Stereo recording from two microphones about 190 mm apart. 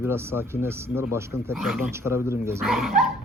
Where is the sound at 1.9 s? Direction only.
15° right (ahead or behind).